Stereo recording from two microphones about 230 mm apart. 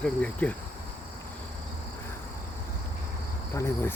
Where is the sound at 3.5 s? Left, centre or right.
Centre.